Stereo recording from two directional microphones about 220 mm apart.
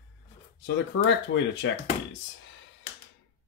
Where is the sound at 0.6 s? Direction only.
50° left (ahead or behind).